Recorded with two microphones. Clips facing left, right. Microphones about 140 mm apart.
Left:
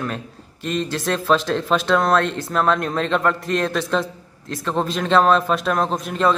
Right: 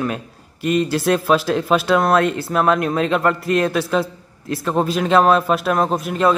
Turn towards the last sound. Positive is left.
turn(degrees=-5)  # may be behind; listen again after turning